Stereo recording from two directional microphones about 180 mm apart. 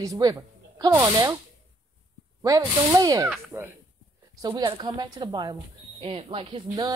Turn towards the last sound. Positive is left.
turn(degrees=-25)  # may be behind; listen again after turning